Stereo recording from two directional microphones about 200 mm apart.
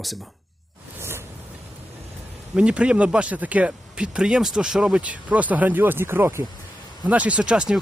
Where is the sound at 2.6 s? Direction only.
5° right (ahead or behind).